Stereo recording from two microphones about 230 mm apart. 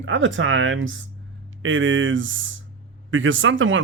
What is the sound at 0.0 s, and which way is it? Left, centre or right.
Speech, right.